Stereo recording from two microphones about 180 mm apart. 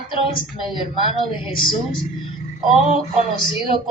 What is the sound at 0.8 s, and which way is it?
A woman's voice, 30° left (ahead or behind).